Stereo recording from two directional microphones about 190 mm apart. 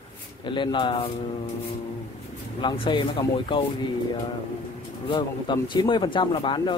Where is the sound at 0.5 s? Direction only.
25° left (ahead or behind).